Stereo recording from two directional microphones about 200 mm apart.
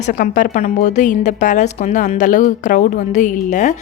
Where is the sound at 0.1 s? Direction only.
45° left (ahead or behind).